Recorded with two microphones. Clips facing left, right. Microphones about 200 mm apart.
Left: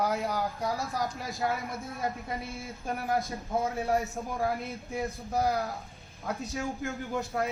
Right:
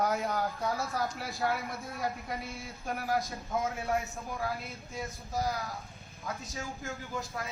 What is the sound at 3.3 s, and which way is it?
Speech, 30° left (ahead or behind).